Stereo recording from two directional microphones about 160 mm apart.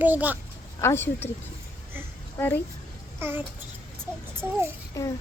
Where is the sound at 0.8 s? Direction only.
15° left (ahead or behind).